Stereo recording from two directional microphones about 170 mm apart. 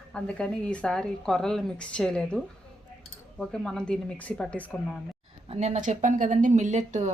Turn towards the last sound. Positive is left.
turn(degrees=-45)  # may be behind; listen again after turning